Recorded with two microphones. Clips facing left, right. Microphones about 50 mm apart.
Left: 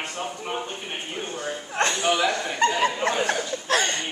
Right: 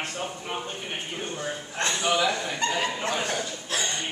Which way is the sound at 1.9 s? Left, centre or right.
Centre.